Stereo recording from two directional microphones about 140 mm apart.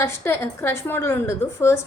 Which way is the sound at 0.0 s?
20° left (ahead or behind).